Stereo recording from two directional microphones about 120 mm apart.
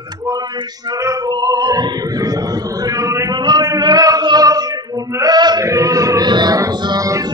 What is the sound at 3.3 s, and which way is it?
Male singing, 35° right (ahead or behind).